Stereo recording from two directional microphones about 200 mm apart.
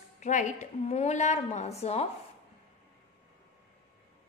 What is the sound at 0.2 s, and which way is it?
A woman's voice, 35° left (ahead or behind).